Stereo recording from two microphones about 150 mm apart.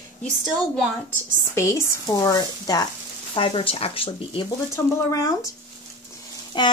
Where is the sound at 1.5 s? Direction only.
20° left (ahead or behind).